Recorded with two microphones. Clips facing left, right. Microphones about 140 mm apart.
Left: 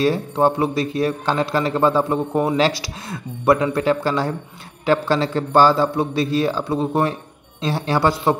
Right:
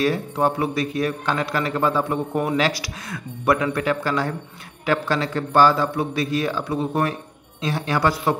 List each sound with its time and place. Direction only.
0.0 s a man's voice: 30° left (ahead or behind)